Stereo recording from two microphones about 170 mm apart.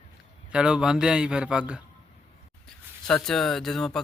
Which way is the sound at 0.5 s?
5° right (ahead or behind).